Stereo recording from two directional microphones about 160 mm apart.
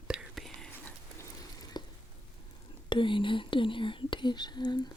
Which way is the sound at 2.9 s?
30° left (ahead or behind).